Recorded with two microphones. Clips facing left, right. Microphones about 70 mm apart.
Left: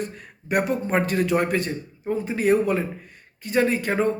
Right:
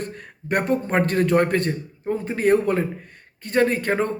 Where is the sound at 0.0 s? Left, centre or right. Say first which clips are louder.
Even; right.